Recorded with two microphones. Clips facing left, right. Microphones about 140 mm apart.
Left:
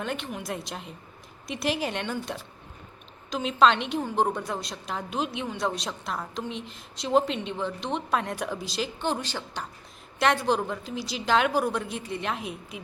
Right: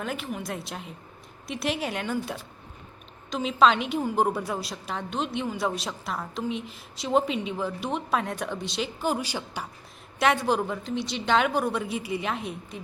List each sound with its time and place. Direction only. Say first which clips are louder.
0.0 s a woman's voice: even; centre (ahead or behind)